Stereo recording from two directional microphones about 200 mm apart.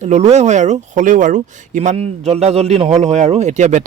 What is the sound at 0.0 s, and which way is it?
Speech, 35° right (ahead or behind).